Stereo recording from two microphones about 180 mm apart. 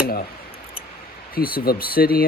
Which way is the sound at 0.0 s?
55° left (ahead or behind).